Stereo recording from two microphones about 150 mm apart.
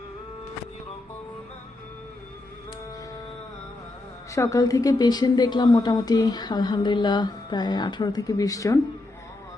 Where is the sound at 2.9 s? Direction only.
25° left (ahead or behind).